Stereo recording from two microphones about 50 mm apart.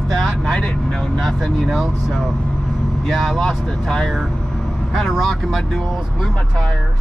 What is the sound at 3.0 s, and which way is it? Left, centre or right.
Speech, centre.